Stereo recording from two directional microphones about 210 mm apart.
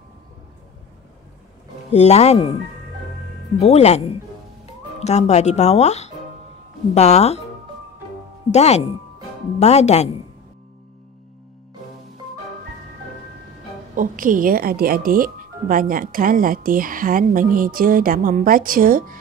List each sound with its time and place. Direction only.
1.9 s speech: 30° left (ahead or behind)
3.5 s speech: 30° left (ahead or behind)
8.5 s speech: 30° left (ahead or behind)
13.9 s speech: 40° right (ahead or behind)